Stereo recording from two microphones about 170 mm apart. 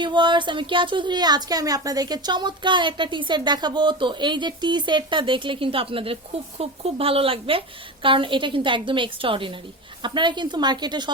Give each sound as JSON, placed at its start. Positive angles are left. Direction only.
{"t": 0.0, "sound": "a woman's voice", "side_deg": -25}